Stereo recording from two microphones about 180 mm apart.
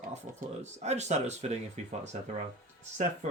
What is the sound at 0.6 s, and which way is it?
Speech, 40° right (ahead or behind).